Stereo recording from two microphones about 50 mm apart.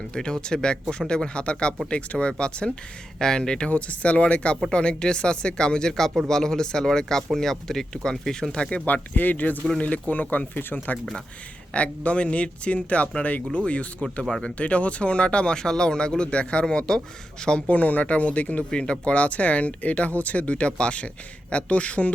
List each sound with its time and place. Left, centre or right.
0.1 s speech: centre
3.7 s speech: left
8.9 s speech: left
10.9 s speech: centre
11.7 s speech: left
17.7 s speech: left